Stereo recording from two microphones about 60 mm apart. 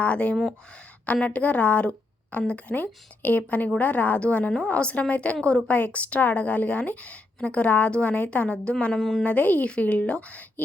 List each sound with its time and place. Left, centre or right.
0.0 s a woman's voice: left; by 9.2 s centre
9.2 s a woman's voice: left